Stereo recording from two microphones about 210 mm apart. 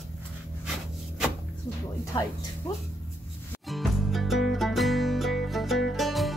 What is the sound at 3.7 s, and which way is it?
Music, centre (ahead or behind).